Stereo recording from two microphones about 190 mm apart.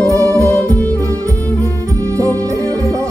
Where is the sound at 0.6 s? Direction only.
10° left (ahead or behind).